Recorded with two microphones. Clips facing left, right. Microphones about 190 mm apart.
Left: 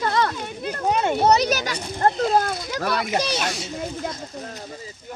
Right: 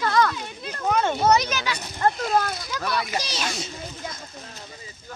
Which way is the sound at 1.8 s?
30° left (ahead or behind).